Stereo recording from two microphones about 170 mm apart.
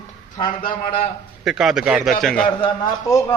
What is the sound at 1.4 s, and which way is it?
A man's voice, centre (ahead or behind).